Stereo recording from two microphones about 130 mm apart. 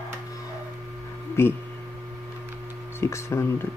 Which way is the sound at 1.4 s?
20° left (ahead or behind).